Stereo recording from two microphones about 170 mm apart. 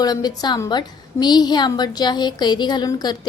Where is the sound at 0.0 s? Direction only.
25° left (ahead or behind).